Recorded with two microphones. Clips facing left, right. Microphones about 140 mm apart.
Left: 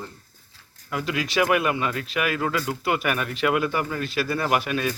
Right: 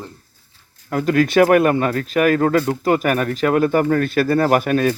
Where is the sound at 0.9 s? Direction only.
45° right (ahead or behind).